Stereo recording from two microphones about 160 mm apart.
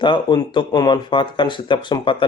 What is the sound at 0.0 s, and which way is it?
Speech, 30° left (ahead or behind).